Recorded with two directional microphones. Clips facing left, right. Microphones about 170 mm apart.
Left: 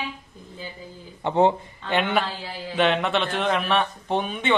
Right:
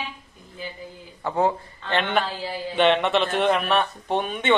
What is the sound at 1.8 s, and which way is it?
A man's voice, 5° left (ahead or behind).